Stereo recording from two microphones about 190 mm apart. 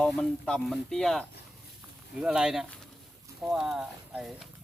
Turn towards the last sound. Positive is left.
turn(degrees=-5)  # may be behind; listen again after turning